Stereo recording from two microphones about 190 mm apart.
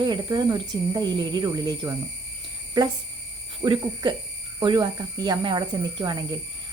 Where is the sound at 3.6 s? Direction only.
25° right (ahead or behind).